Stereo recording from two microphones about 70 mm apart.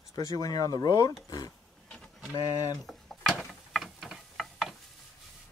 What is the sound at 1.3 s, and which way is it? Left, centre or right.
Speech, left.